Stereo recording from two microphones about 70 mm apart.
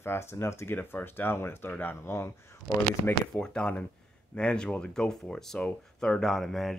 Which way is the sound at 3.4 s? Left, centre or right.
Centre.